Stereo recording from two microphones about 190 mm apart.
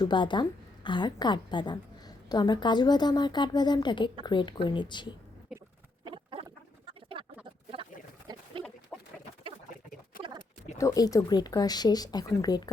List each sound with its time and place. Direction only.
0.0 s a woman's voice: 25° left (ahead or behind)
5.5 s rodents: 5° right (ahead or behind)
8.3 s a sound: 20° right (ahead or behind)
8.6 s bird: 5° left (ahead or behind)
10.8 s a woman's voice: 15° left (ahead or behind)